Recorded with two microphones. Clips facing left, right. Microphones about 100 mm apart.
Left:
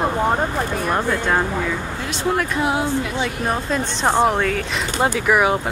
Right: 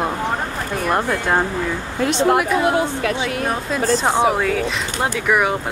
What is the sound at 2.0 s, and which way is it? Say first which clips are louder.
Speech: right 6 dB; 65° right (ahead or behind).